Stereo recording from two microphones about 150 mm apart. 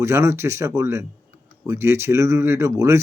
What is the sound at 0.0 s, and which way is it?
Speech, 15° right (ahead or behind).